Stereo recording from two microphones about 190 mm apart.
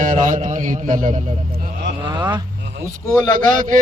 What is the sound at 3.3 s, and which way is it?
Speech, 45° right (ahead or behind).